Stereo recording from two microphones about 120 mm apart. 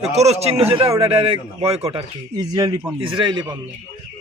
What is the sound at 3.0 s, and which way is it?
Speech, 45° right (ahead or behind).